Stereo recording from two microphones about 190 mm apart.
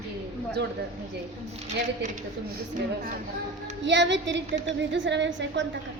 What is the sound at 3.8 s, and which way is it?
A woman's voice, 70° right (ahead or behind).